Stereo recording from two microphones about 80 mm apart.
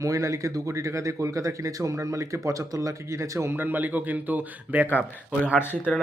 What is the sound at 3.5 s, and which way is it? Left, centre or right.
A man's voice, right.